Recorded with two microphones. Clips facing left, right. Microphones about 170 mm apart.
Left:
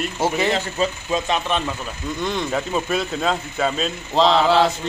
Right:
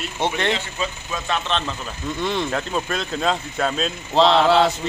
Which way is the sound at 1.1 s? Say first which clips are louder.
Left 3 dB; 20° left (ahead or behind).